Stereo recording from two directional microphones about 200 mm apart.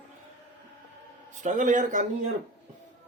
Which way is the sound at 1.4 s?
40° right (ahead or behind).